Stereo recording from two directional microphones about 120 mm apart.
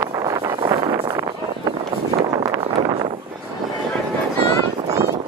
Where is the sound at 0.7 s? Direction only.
45° right (ahead or behind).